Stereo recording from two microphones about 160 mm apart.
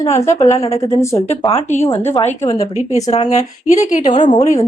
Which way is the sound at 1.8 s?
15° left (ahead or behind).